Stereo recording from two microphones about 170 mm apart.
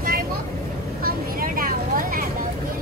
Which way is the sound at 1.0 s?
60° right (ahead or behind).